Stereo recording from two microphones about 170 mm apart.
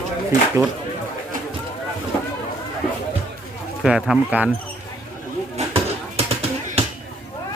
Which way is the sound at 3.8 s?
5° right (ahead or behind).